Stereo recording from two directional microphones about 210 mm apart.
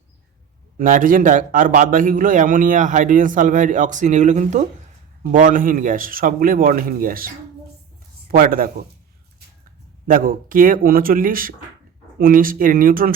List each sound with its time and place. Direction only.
0.8 s a man's voice: 40° right (ahead or behind)
8.3 s a man's voice: 40° right (ahead or behind)
10.1 s a man's voice: 40° right (ahead or behind)